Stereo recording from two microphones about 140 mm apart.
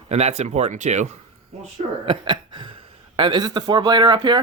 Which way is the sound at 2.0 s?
35° right (ahead or behind).